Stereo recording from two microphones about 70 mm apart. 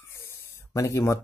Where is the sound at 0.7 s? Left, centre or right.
Left.